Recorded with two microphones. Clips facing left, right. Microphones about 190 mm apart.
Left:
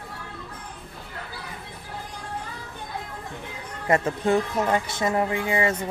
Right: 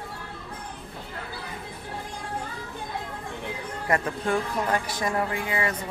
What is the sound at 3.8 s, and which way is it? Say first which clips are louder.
Speech: left 4 dB; 25° left (ahead or behind).